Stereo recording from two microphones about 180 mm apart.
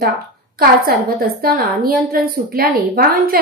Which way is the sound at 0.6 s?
55° right (ahead or behind).